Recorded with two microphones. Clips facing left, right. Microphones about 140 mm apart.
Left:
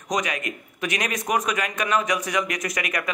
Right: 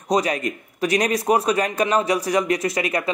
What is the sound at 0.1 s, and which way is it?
A man's voice, 35° right (ahead or behind).